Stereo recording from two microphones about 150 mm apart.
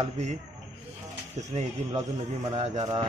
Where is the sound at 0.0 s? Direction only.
50° right (ahead or behind).